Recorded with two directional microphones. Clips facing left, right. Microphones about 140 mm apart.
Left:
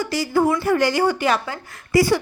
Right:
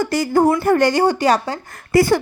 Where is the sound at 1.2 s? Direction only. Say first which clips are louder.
Right 4 dB; 35° right (ahead or behind).